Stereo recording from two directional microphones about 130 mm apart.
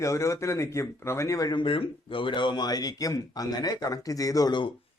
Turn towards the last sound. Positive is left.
turn(degrees=35)  # may be behind; listen again after turning